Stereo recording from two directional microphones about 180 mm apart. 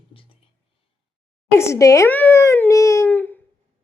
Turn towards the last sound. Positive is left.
turn(degrees=10)  # may be behind; listen again after turning